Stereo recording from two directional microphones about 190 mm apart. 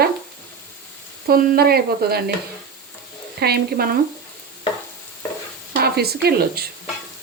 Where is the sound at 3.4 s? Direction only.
55° right (ahead or behind).